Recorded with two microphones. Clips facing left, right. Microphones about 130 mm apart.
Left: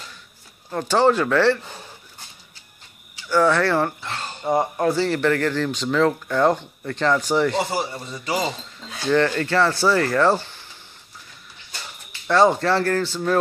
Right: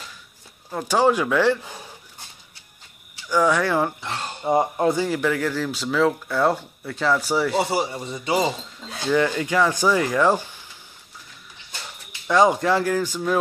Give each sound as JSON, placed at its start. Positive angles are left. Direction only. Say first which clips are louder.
{"t": 0.7, "sound": "speech", "louder": "left 1 dB", "side_deg": -10}
{"t": 3.3, "sound": "speech", "louder": "left 2 dB", "side_deg": -10}
{"t": 8.5, "sound": "speech", "louder": "right 2 dB", "side_deg": -10}
{"t": 12.3, "sound": "speech", "louder": "left 1 dB", "side_deg": -15}